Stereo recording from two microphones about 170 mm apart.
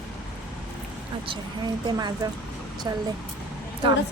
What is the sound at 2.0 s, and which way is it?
Speech, 25° right (ahead or behind).